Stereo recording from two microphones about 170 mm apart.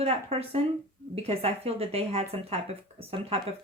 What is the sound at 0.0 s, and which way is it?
Speech, 35° right (ahead or behind).